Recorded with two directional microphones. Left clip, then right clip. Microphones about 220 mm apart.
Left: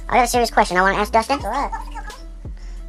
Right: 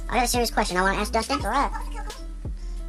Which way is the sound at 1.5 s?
15° right (ahead or behind).